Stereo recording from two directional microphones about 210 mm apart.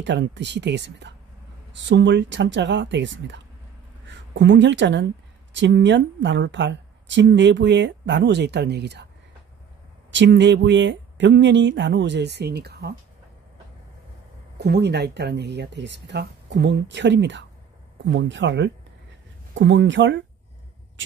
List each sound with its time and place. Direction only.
0.0 s speech: 55° right (ahead or behind)
10.1 s speech: 55° right (ahead or behind)
14.6 s speech: 50° right (ahead or behind)